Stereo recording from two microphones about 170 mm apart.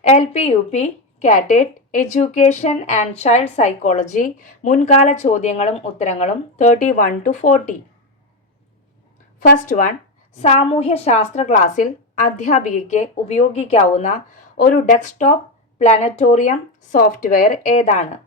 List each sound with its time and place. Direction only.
0.0 s a woman's voice: 40° left (ahead or behind)
9.5 s a woman's voice: 50° left (ahead or behind)
14.5 s a woman's voice: 55° left (ahead or behind)